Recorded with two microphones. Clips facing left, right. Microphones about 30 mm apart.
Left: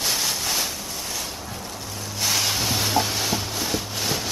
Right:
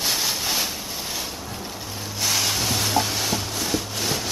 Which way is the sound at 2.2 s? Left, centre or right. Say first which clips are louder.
Even; centre.